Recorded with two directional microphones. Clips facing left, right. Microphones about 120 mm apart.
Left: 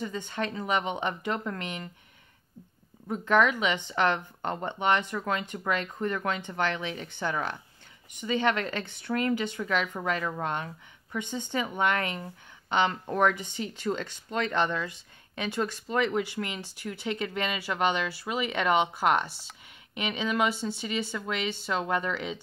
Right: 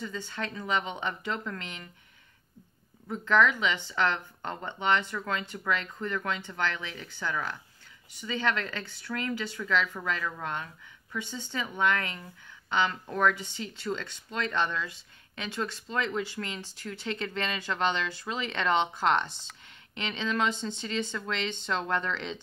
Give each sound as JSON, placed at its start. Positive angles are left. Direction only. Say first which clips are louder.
{"t": 0.0, "sound": "speech", "louder": "left 4 dB", "side_deg": 20}
{"t": 3.1, "sound": "speech", "louder": "left 1 dB", "side_deg": 15}